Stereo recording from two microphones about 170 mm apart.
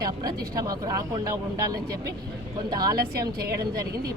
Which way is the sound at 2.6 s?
25° right (ahead or behind).